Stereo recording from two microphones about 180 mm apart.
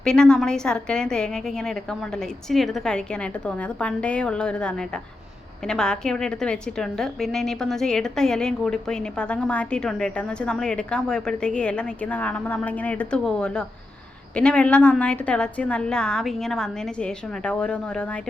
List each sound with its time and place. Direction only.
0.0 s a woman's voice: 5° left (ahead or behind)